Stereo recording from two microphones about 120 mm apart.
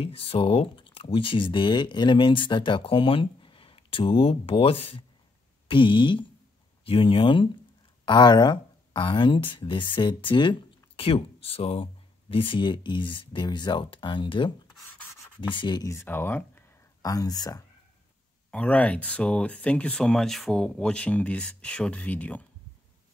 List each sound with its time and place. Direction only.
0.0 s speech: 55° left (ahead or behind); by 15.9 s 40° left (ahead or behind)
15.9 s speech: 20° left (ahead or behind)
17.0 s speech: 30° left (ahead or behind)
18.5 s speech: 10° left (ahead or behind)